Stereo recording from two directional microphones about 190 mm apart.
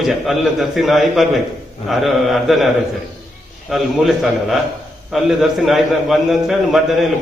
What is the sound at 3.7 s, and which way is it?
A man's voice, centre (ahead or behind).